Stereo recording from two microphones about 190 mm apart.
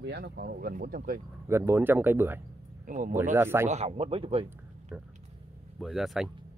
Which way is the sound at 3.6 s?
35° right (ahead or behind).